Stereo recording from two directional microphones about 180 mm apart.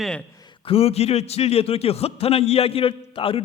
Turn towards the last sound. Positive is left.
turn(degrees=30)  # may be behind; listen again after turning